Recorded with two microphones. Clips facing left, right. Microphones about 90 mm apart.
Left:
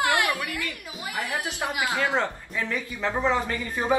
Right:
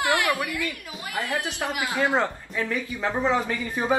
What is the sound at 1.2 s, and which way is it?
Speech, 20° left (ahead or behind).